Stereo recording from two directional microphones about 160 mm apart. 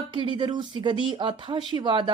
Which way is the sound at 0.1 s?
30° right (ahead or behind).